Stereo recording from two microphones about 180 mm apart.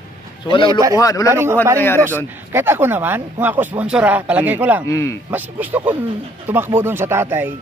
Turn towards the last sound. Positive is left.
turn(degrees=-10)  # may be behind; listen again after turning